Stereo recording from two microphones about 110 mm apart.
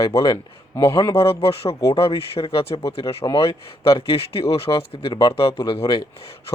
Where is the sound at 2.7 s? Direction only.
45° left (ahead or behind).